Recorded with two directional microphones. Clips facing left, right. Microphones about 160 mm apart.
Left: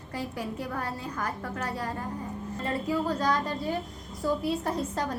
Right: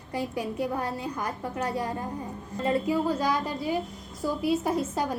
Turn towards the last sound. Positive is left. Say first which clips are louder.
# right 3 dB
turn(degrees=-5)  # may be behind; listen again after turning